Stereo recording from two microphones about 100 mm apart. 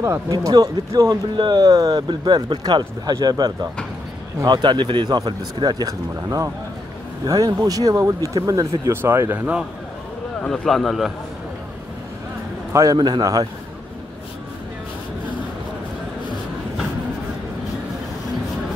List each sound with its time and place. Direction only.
0.3 s speech: 35° right (ahead or behind)
8.9 s speech: 25° right (ahead or behind)
10.4 s a man's voice: 5° left (ahead or behind)
12.7 s speech: 35° right (ahead or behind)